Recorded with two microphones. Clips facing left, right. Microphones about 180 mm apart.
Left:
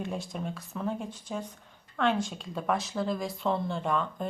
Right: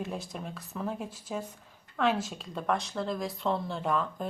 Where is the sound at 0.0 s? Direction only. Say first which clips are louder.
Left 2 dB; centre (ahead or behind).